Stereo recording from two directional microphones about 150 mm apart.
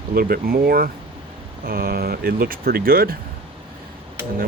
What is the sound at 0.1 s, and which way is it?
Speech, 80° right.